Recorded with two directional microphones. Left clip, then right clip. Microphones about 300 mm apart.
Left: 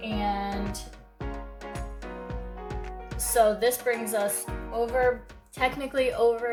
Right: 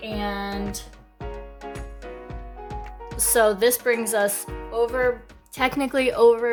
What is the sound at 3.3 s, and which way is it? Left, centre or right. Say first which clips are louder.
Speech: right 3 dB; right.